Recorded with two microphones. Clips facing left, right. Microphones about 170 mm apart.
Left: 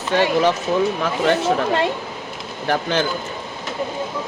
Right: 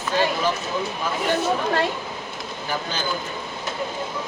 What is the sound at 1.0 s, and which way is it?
Speech, 75° left (ahead or behind).